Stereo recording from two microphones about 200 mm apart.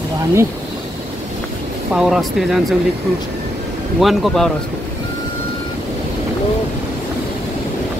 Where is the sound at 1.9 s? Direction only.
Centre (ahead or behind).